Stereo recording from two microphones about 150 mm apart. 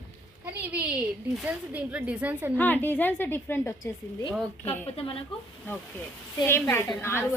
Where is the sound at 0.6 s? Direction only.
10° right (ahead or behind).